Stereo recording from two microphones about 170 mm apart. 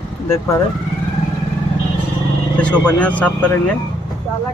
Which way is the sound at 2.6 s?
10° left (ahead or behind).